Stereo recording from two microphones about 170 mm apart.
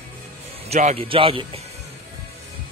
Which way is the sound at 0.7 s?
40° right (ahead or behind).